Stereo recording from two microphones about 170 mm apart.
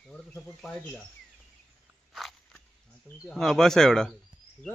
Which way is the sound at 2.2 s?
Centre (ahead or behind).